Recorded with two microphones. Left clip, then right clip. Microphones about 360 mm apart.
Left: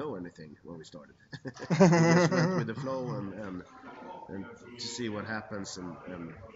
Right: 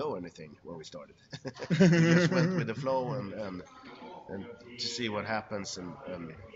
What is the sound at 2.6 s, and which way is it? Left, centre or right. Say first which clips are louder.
Speech: right 2 dB; centre.